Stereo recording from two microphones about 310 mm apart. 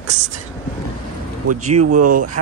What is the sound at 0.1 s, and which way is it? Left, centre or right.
Speech, right.